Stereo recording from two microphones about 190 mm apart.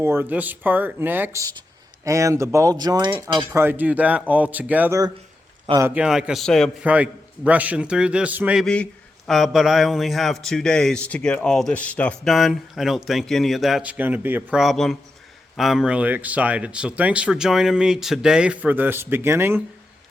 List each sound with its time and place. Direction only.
0.0 s a man's voice: 10° right (ahead or behind)
5.9 s a man's voice: 5° right (ahead or behind)